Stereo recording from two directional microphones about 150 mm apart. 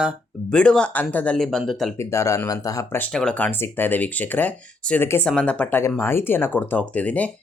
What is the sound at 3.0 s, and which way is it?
Speech, 5° left (ahead or behind).